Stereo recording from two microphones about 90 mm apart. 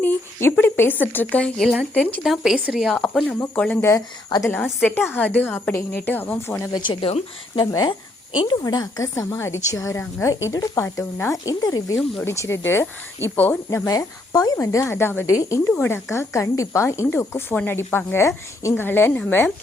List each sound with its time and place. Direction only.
0.6 s a woman's voice: 25° left (ahead or behind)
1.5 s speech: 5° left (ahead or behind)
1.9 s speech: 15° left (ahead or behind)
2.2 s speech: 5° right (ahead or behind)
3.2 s a woman's voice: 25° left (ahead or behind)
3.8 s a woman's voice: 40° left (ahead or behind)
4.4 s a woman's voice: 25° left (ahead or behind)
6.7 s speech: 65° left (ahead or behind)
7.6 s a woman's voice: 40° left (ahead or behind)
8.4 s a woman's voice: 50° left (ahead or behind)
12.2 s a woman's voice: 30° left (ahead or behind)
13.7 s a woman's voice: 40° left (ahead or behind)
15.3 s a woman's voice: 35° left (ahead or behind)
15.7 s a woman's voice: 25° left (ahead or behind)